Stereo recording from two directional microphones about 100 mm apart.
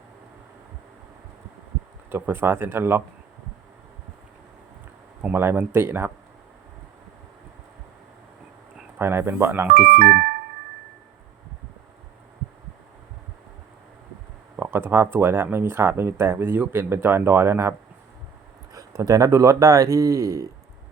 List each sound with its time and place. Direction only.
2.0 s speech: 20° right (ahead or behind)
5.2 s speech: 25° right (ahead or behind)
9.0 s speech: 25° right (ahead or behind)
14.5 s speech: 20° right (ahead or behind)
18.7 s speech: 35° right (ahead or behind)